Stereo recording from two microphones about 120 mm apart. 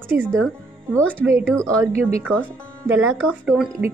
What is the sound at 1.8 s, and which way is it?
Speech, 20° right (ahead or behind).